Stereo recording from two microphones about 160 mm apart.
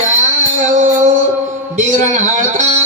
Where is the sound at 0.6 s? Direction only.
50° right (ahead or behind).